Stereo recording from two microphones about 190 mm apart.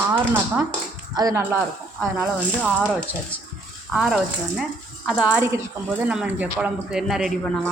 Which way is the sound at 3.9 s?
5° right (ahead or behind).